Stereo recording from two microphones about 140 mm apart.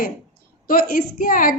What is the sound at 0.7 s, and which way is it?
Speech, 75° left (ahead or behind).